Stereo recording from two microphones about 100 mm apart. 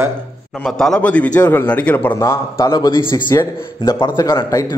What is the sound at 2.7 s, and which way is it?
A man's voice, 45° left (ahead or behind).